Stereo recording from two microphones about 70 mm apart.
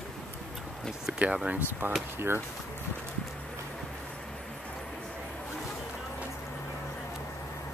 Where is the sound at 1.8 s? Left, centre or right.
Right.